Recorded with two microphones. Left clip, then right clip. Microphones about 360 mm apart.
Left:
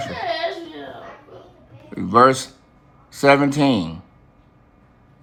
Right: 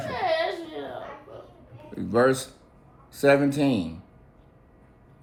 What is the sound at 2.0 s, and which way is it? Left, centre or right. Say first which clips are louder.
Speech: left 8 dB; left.